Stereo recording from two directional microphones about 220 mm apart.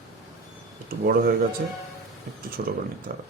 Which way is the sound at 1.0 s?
40° right (ahead or behind).